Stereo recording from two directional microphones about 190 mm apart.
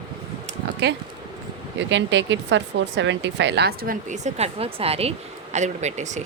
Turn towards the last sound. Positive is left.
turn(degrees=-40)  # may be behind; listen again after turning